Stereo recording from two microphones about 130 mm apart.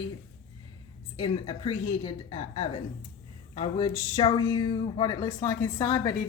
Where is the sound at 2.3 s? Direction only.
45° left (ahead or behind).